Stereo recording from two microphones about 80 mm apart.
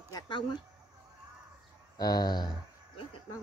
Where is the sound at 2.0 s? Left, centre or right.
Left.